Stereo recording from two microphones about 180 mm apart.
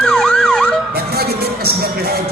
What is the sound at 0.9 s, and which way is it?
Music, 60° right (ahead or behind).